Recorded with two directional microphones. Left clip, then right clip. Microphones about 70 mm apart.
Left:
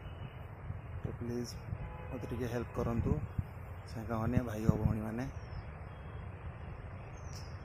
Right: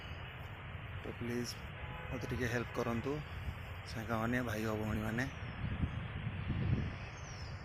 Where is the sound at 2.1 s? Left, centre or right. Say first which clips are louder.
Right 1 dB; centre.